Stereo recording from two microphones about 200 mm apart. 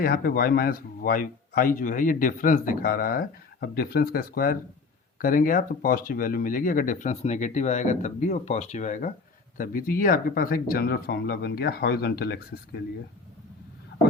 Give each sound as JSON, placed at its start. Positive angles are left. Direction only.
{"t": 0.0, "sound": "speech", "side_deg": 50}